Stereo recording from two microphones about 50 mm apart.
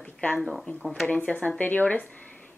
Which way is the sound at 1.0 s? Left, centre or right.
Left.